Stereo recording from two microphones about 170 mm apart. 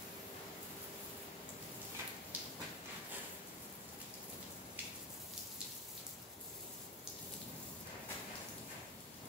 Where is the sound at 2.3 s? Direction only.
10° right (ahead or behind).